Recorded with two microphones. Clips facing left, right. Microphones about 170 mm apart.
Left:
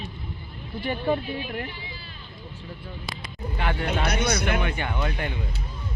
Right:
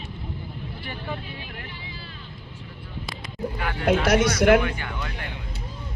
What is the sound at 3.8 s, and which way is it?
Speech, 90° right.